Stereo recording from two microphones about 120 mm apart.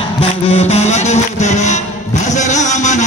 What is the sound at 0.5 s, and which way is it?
Music, 65° left (ahead or behind).